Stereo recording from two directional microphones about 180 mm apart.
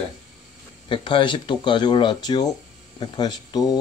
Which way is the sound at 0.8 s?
30° left (ahead or behind).